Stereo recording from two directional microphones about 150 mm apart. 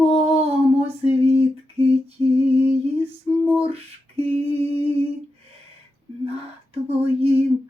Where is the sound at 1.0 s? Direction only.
40° right (ahead or behind).